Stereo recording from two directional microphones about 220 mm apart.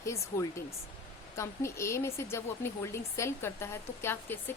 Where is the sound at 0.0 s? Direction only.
15° left (ahead or behind).